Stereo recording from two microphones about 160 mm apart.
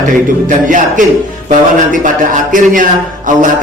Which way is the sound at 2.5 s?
55° right (ahead or behind).